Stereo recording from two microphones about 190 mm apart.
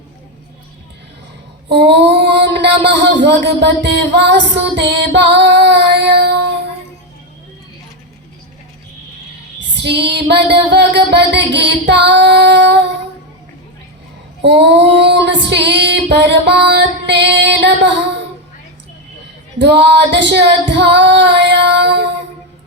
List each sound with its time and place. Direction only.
1.9 s a sound: 65° right (ahead or behind)
9.7 s music: 65° right (ahead or behind)
14.4 s female singing: 65° right (ahead or behind)
19.5 s female singing: 65° right (ahead or behind)